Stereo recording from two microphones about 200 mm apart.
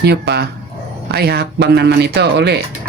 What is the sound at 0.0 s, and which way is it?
Speech, 55° right (ahead or behind).